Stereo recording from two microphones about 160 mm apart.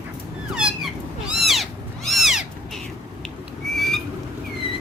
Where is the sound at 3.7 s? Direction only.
Centre (ahead or behind).